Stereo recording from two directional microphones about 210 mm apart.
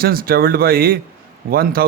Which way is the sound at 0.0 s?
45° right (ahead or behind).